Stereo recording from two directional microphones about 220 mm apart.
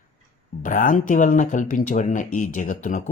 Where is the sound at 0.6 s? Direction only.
40° left (ahead or behind).